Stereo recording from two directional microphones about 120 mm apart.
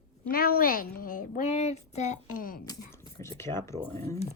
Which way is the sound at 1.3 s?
70° left (ahead or behind).